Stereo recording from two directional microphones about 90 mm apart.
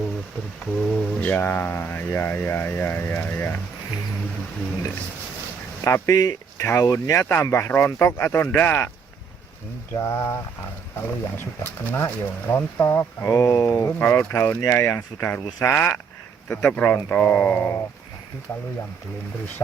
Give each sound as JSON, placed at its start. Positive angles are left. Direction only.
{"t": 0.6, "sound": "speech", "side_deg": 15}
{"t": 5.8, "sound": "speech", "side_deg": 35}
{"t": 9.9, "sound": "speech", "side_deg": 30}
{"t": 14.0, "sound": "speech", "side_deg": 20}